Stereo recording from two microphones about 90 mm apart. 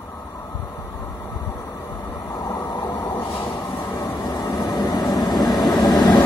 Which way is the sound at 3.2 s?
40° left (ahead or behind).